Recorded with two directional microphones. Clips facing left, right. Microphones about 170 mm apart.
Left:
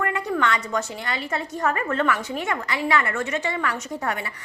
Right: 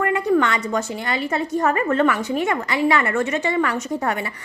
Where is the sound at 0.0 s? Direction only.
10° right (ahead or behind).